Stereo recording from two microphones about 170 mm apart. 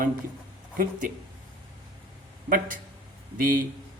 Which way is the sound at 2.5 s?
55° right (ahead or behind).